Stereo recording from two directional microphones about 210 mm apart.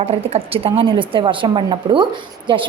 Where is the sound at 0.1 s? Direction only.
25° right (ahead or behind).